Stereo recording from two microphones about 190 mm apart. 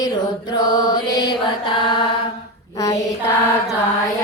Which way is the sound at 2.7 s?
15° left (ahead or behind).